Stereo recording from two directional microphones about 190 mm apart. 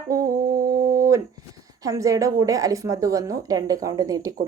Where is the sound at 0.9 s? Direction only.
15° right (ahead or behind).